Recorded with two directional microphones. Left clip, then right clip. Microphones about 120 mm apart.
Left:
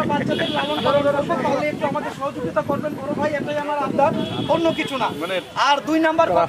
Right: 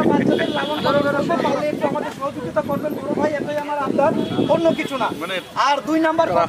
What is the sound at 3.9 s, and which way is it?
Speech, centre (ahead or behind).